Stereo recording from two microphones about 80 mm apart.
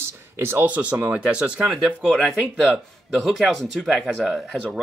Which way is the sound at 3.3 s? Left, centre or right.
Centre.